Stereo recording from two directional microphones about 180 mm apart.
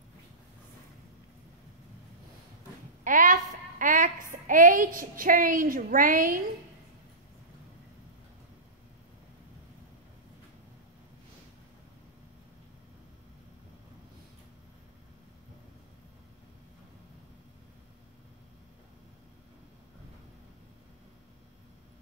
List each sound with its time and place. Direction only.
3.0 s a woman's voice: 50° right (ahead or behind)